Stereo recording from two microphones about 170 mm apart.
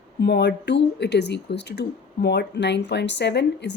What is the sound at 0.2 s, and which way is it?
Speech, 75° left (ahead or behind).